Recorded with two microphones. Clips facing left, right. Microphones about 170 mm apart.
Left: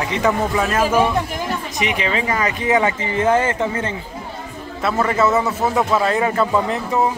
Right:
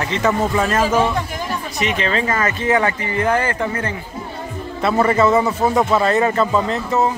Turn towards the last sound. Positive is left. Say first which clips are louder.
# right 1 dB
turn(degrees=15)  # may be behind; listen again after turning